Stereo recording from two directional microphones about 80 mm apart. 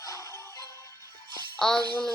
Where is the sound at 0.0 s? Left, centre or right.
Left.